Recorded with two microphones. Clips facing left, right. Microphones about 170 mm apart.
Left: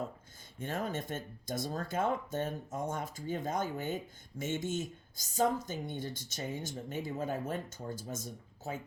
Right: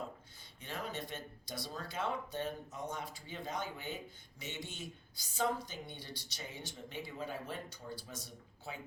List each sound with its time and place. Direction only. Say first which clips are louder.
0.6 s speech: left 6 dB; 50° left (ahead or behind)